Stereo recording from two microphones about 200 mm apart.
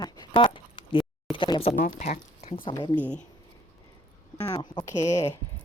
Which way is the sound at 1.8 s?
35° left (ahead or behind).